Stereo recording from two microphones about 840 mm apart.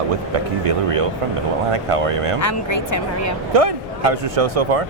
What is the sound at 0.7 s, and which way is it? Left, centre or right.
Speech, right.